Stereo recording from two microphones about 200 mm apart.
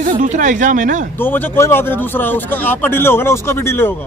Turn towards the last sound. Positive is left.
turn(degrees=10)  # may be behind; listen again after turning